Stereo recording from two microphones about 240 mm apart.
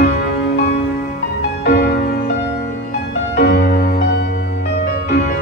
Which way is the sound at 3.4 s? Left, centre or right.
Left.